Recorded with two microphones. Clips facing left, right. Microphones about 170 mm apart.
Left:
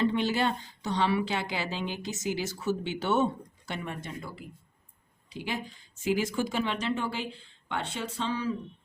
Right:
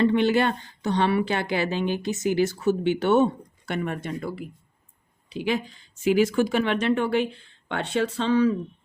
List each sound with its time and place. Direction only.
0.0 s a woman's voice: 65° right (ahead or behind)